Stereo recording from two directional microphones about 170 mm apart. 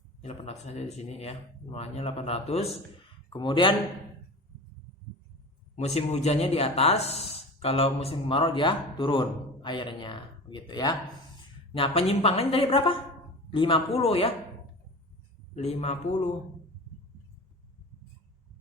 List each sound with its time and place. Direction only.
0.2 s speech: 40° left (ahead or behind)
5.7 s speech: 40° left (ahead or behind)
15.5 s speech: 40° left (ahead or behind)